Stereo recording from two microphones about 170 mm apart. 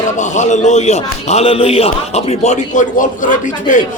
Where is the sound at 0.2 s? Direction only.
45° left (ahead or behind).